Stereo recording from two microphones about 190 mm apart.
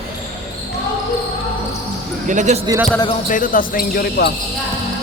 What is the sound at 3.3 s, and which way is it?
Speech, 45° left (ahead or behind).